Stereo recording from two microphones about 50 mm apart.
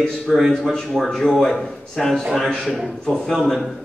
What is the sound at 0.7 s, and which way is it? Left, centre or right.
A man's voice, centre.